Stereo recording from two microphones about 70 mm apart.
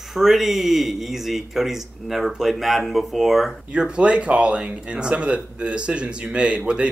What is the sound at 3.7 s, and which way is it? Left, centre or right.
Speech, centre.